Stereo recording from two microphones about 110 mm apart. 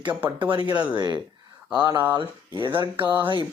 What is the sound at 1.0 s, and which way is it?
Speech, 40° right (ahead or behind).